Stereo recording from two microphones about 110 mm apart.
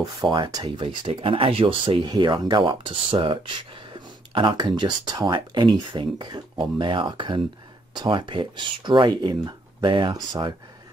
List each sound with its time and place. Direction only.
0.0 s speech: 40° right (ahead or behind)
0.7 s speech: 50° right (ahead or behind)
2.0 s speech: 40° right (ahead or behind)